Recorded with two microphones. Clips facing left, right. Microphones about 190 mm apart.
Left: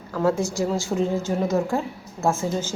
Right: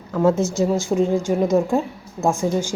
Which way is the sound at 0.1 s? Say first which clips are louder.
Right 4 dB; 20° right (ahead or behind).